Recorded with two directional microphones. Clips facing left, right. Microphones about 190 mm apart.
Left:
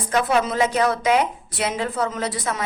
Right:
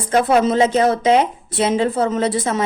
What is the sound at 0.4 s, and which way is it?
A woman's voice, 25° right (ahead or behind).